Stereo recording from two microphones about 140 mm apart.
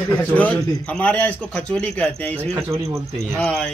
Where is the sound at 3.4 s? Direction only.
5° left (ahead or behind).